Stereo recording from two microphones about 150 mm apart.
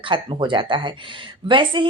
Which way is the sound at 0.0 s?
30° right (ahead or behind).